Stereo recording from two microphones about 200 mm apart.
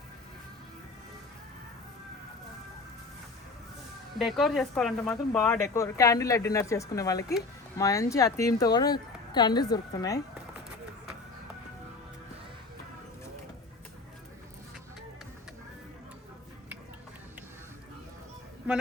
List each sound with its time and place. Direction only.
4.2 s speech: centre (ahead or behind); by 10.2 s 20° left (ahead or behind)